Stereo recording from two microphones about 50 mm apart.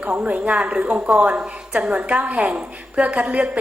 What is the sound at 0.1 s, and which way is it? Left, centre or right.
A woman's voice, right.